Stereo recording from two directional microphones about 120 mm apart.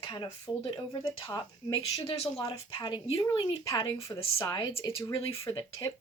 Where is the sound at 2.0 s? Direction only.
55° left (ahead or behind).